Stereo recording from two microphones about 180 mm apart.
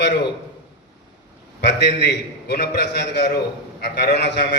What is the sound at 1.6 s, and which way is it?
A man's voice, 70° left (ahead or behind).